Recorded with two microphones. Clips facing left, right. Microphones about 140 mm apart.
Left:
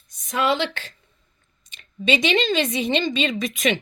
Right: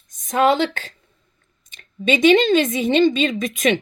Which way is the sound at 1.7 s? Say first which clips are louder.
Right 2 dB; 45° right (ahead or behind).